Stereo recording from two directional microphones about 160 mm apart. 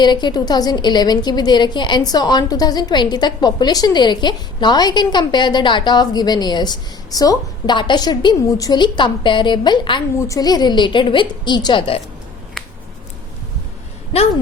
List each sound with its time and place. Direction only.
0.0 s a woman's voice: 25° left (ahead or behind)
12.6 s finger snapping: centre (ahead or behind)